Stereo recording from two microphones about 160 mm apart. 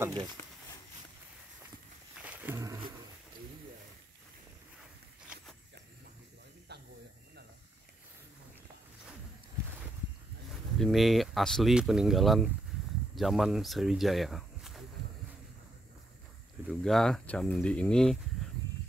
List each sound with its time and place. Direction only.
0.4 s a sound: 15° left (ahead or behind)
2.1 s roaring cats: 10° right (ahead or behind)
6.7 s snake: 90° right
10.5 s speech: centre (ahead or behind)
16.6 s speech: centre (ahead or behind)